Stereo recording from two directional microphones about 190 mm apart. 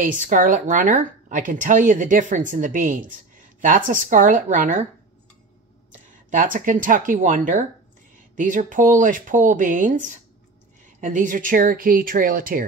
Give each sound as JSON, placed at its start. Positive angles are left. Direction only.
{"t": 0.0, "sound": "a woman's voice", "side_deg": -45}
{"t": 6.0, "sound": "a woman's voice", "side_deg": -45}